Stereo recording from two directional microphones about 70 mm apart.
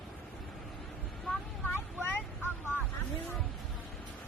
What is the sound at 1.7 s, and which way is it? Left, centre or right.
Vehicle, left.